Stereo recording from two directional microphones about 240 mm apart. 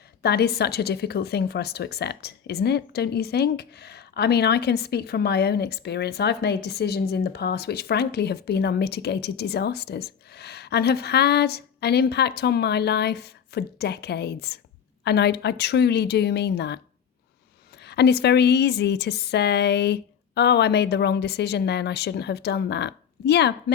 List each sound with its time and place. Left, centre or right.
0.2 s a woman's voice: left
17.8 s a woman's voice: left